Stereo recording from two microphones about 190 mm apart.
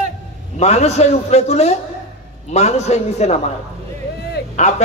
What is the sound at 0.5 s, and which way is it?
A man's voice, 35° left (ahead or behind).